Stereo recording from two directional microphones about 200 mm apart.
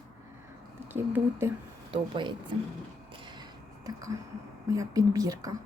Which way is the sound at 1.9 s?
25° right (ahead or behind).